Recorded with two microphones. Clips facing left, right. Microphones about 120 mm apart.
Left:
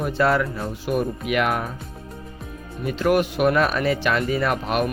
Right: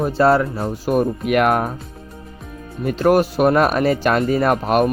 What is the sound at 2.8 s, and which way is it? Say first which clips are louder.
Speech: right 5 dB; 45° right (ahead or behind).